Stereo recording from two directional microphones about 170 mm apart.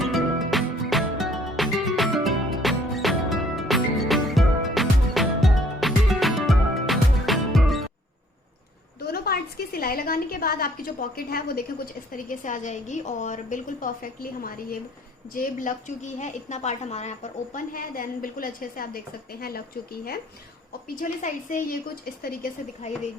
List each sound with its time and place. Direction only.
0.0 s music: centre (ahead or behind)
9.1 s a woman's voice: 65° left (ahead or behind)
12.1 s a woman's voice: 50° left (ahead or behind)
17.7 s a woman's voice: 55° left (ahead or behind)
20.9 s a woman's voice: 50° left (ahead or behind)
22.8 s speech: 40° left (ahead or behind)